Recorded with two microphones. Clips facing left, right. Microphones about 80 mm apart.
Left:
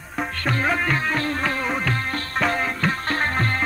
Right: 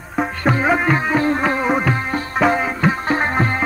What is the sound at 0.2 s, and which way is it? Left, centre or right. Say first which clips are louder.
Music: right 6 dB; centre.